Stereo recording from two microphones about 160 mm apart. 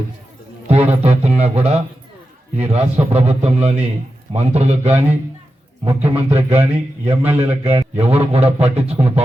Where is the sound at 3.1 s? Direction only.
40° right (ahead or behind).